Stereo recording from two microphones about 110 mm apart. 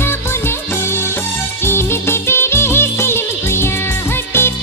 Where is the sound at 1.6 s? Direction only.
20° left (ahead or behind).